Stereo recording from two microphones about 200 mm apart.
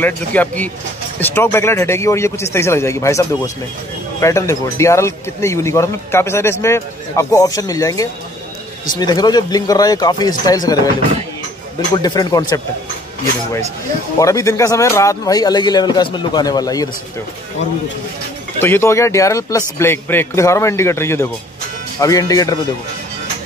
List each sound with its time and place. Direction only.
0.0 s a man's voice: 10° left (ahead or behind)
11.9 s speech: 20° left (ahead or behind)
14.2 s speech: 15° left (ahead or behind)
18.6 s a man's voice: 10° left (ahead or behind)